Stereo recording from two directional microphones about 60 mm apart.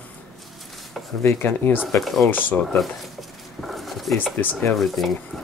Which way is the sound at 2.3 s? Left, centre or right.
Left.